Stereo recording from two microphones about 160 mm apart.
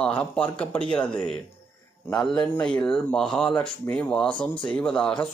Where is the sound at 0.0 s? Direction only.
5° left (ahead or behind).